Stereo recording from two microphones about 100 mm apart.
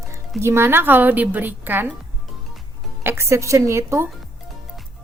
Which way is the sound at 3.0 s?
25° right (ahead or behind).